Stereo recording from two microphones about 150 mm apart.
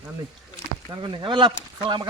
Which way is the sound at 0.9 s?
30° right (ahead or behind).